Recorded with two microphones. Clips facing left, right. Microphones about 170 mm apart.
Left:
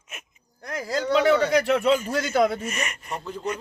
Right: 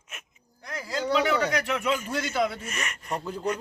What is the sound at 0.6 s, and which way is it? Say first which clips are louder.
Speech: left 5 dB; 45° left (ahead or behind).